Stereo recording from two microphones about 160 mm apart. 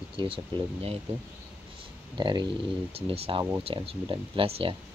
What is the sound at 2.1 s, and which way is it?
Speech, 30° right (ahead or behind).